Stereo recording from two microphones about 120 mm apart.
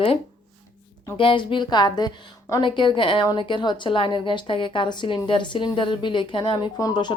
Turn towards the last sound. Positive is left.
turn(degrees=35)  # may be behind; listen again after turning